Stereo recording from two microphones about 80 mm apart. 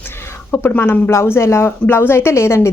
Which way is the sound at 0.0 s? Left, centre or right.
Left.